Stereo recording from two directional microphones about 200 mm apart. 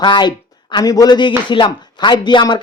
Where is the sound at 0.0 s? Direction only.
20° left (ahead or behind).